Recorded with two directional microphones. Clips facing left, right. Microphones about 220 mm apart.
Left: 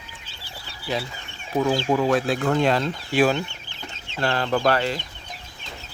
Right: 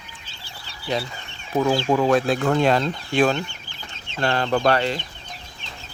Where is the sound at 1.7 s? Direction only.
45° right (ahead or behind).